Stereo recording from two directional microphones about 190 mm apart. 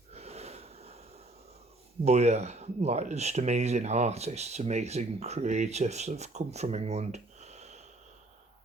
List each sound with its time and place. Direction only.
0.1 s wheeze: 35° right (ahead or behind)
2.0 s speech: 35° right (ahead or behind)